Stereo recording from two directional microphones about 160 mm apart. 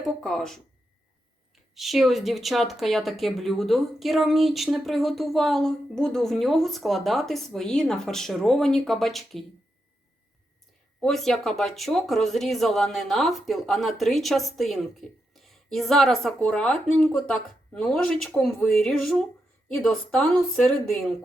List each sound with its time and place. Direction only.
0.0 s a sound: centre (ahead or behind)
1.7 s speech: centre (ahead or behind)
11.0 s speech: centre (ahead or behind)